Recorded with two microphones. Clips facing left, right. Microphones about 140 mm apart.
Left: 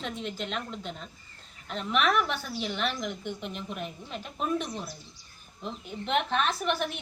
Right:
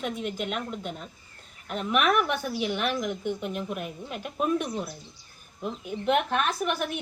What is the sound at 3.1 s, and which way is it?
Speech, 45° right (ahead or behind).